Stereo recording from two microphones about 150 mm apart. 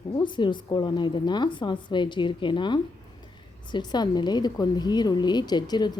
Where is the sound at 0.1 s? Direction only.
30° left (ahead or behind).